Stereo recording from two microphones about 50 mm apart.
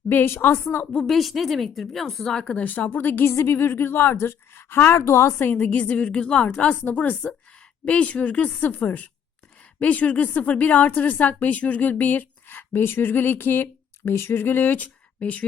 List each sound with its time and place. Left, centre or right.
0.1 s a woman's voice: left
1.0 s speech: centre
2.6 s a woman's voice: left
3.2 s a woman's voice: left
5.5 s a woman's voice: left